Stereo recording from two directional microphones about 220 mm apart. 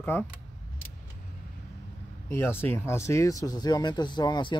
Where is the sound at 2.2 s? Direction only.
10° left (ahead or behind).